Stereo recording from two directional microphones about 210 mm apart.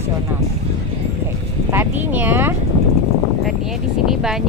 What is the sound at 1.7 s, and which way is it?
Speech, 10° right (ahead or behind).